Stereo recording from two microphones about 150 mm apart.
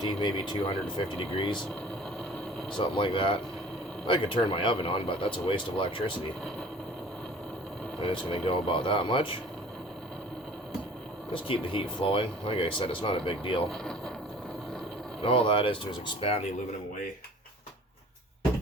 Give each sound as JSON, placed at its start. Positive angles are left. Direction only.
{"t": 0.0, "sound": "speech", "side_deg": 30}
{"t": 2.6, "sound": "speech", "side_deg": 35}
{"t": 8.1, "sound": "speech", "side_deg": 35}
{"t": 11.3, "sound": "speech", "side_deg": 35}
{"t": 13.7, "sound": "a sound", "side_deg": 5}
{"t": 15.2, "sound": "speech", "side_deg": 35}